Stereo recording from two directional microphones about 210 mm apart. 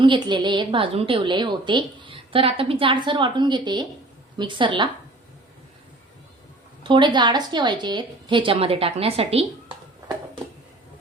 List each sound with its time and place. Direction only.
0.0 s a woman's voice: 20° right (ahead or behind)
6.8 s a woman's voice: 20° right (ahead or behind)